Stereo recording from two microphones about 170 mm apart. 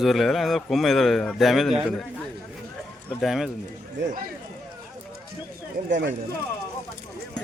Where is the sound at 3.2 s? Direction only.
Centre (ahead or behind).